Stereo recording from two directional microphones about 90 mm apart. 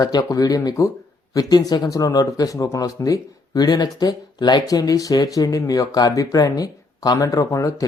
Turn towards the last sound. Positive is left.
turn(degrees=40)  # may be behind; listen again after turning